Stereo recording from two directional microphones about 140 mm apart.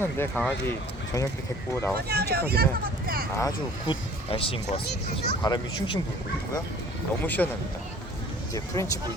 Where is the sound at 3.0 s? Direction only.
90° right.